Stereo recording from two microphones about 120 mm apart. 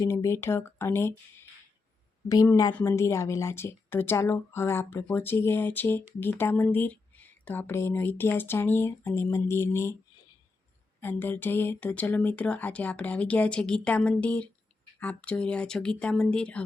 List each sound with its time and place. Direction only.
0.0 s speech: 25° left (ahead or behind)
2.8 s speech: 25° left (ahead or behind)
11.0 s speech: 15° left (ahead or behind)